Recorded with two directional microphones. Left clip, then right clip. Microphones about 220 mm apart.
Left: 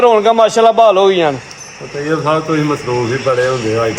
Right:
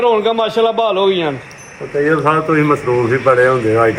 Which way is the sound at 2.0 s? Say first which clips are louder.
Even; 10° left (ahead or behind).